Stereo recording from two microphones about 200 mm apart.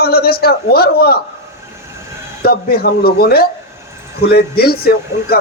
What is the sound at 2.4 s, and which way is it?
A man's voice, 50° left (ahead or behind).